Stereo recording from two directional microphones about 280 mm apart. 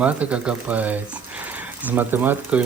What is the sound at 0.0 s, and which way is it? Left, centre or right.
Speech, centre.